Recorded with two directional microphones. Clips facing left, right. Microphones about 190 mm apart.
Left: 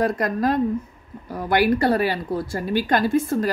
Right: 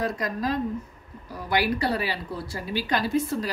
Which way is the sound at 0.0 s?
55° left (ahead or behind).